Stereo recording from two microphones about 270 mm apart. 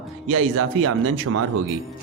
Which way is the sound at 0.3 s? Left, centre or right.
Right.